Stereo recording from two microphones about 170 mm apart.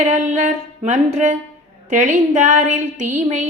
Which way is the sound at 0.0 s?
40° right (ahead or behind).